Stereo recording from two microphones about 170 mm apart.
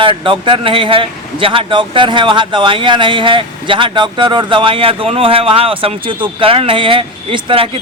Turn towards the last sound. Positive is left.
turn(degrees=-30)  # may be behind; listen again after turning